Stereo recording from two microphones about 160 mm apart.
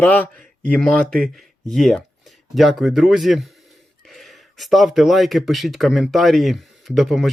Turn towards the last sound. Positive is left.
turn(degrees=0)  # may be behind; listen again after turning